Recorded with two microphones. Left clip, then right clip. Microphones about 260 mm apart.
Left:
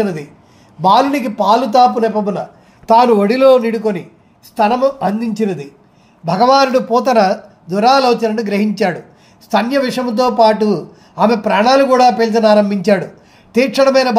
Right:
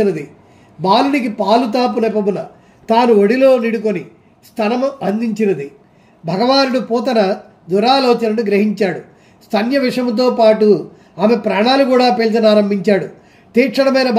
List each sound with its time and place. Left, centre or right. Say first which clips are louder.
1.1 s a man's voice: left 1 dB; left
11.9 s speech: left 2 dB; left
12.5 s a man's voice: left 1 dB; centre